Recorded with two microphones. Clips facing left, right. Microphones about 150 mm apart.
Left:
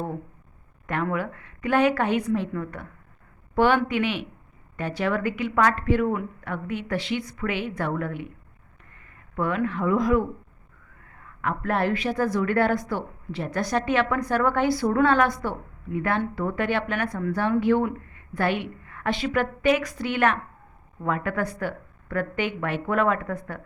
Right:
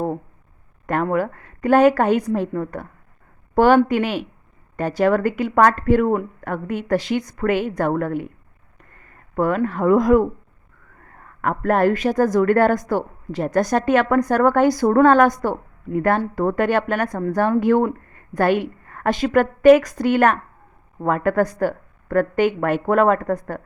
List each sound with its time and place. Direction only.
1.0 s a woman's voice: 40° right (ahead or behind)